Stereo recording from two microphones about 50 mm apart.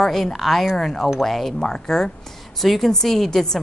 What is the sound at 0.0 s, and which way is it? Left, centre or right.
A woman's voice, centre.